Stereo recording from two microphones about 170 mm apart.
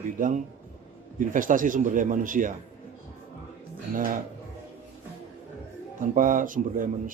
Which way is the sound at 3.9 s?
55° right (ahead or behind).